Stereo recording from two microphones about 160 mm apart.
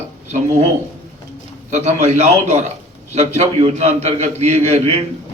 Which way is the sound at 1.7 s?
45° right (ahead or behind).